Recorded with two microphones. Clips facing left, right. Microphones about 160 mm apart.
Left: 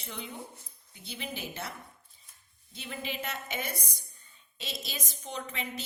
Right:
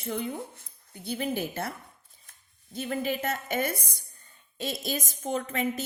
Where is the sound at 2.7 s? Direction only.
45° right (ahead or behind).